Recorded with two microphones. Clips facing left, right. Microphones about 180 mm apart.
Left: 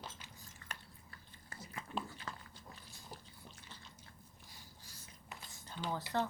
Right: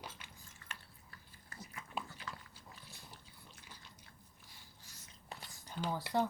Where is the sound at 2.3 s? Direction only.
50° left (ahead or behind).